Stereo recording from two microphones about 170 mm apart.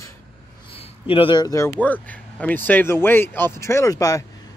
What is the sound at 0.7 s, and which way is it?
Speech, 35° left (ahead or behind).